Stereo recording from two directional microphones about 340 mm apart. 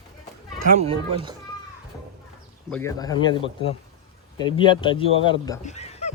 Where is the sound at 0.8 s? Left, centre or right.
Centre.